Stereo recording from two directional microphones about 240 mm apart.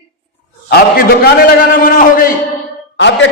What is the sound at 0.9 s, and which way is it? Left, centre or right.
A man's voice, left.